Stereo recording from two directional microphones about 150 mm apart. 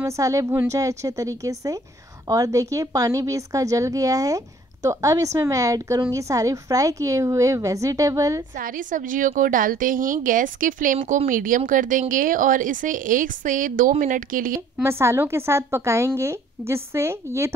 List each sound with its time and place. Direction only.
0.0 s a woman's voice: 20° right (ahead or behind)
8.5 s speech: 65° right (ahead or behind)
14.8 s speech: 15° right (ahead or behind)